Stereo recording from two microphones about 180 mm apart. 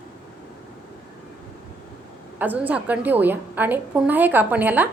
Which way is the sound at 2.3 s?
10° right (ahead or behind).